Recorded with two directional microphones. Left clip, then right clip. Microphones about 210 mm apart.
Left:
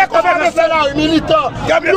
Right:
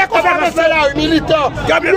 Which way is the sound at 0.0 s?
5° right (ahead or behind).